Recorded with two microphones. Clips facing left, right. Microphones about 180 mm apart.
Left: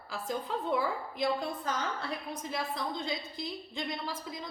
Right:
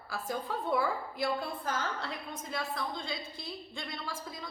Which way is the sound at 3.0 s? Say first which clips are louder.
Left 3 dB; 20° left (ahead or behind).